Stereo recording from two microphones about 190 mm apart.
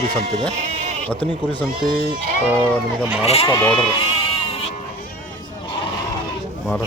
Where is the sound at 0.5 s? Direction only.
35° right (ahead or behind).